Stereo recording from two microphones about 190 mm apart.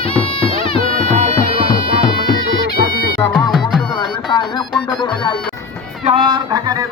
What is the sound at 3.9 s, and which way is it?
Music, 20° left (ahead or behind).